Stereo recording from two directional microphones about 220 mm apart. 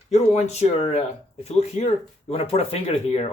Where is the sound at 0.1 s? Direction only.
30° left (ahead or behind).